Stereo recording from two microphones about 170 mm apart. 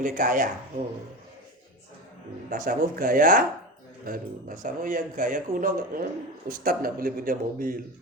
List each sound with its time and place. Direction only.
0.0 s a man's voice: 50° right (ahead or behind)
2.5 s a man's voice: 55° right (ahead or behind)